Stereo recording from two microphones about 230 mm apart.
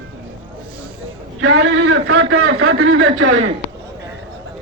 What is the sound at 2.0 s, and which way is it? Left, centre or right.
Speech, right.